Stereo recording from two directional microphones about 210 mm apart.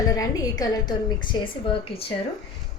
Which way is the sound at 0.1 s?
15° left (ahead or behind).